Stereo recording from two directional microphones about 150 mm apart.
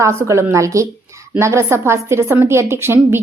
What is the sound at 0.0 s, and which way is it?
A woman's voice, 20° right (ahead or behind).